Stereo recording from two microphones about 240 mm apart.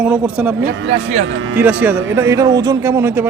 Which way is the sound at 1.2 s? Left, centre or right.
Right.